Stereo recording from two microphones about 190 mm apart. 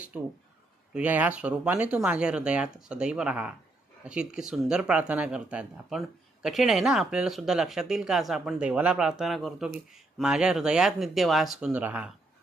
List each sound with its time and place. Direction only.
0.1 s speech: 5° right (ahead or behind)